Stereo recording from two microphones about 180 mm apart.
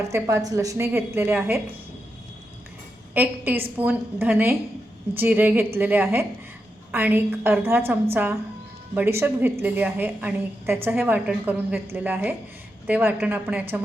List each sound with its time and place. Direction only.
0.0 s a woman's voice: 15° right (ahead or behind)
3.2 s a woman's voice: 10° right (ahead or behind)